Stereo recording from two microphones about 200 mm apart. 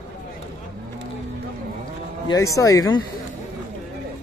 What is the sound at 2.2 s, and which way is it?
Speech, 15° left (ahead or behind).